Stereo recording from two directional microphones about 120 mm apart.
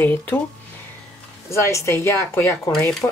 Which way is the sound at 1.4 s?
25° left (ahead or behind).